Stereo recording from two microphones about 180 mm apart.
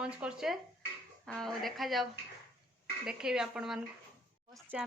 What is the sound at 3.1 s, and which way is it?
Speech, 5° right (ahead or behind).